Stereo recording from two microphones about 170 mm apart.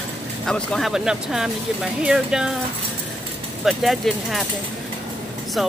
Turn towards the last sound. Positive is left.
turn(degrees=0)  # may be behind; listen again after turning